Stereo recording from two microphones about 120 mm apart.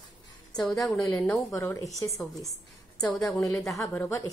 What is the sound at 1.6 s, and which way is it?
Speech, 25° left (ahead or behind).